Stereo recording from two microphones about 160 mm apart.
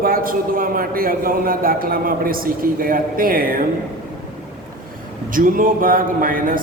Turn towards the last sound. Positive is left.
turn(degrees=-60)  # may be behind; listen again after turning